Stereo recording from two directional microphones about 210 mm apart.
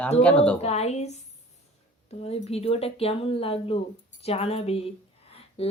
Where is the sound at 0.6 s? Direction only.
30° left (ahead or behind).